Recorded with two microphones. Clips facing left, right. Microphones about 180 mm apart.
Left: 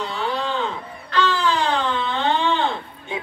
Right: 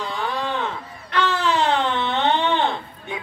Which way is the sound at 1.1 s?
20° right (ahead or behind).